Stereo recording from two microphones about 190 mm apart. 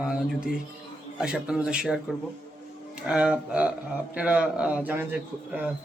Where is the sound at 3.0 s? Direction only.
5° right (ahead or behind).